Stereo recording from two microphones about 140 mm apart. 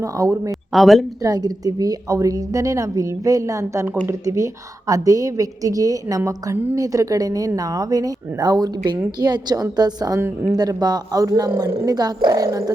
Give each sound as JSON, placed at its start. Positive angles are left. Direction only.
{"t": 0.0, "sound": "a woman's voice", "side_deg": -25}
{"t": 0.7, "sound": "speech", "side_deg": 0}
{"t": 1.2, "sound": "a woman's voice", "side_deg": -25}
{"t": 10.6, "sound": "a woman's voice", "side_deg": -30}